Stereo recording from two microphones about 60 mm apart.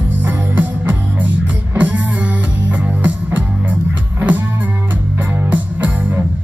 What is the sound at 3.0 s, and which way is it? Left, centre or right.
Music, right.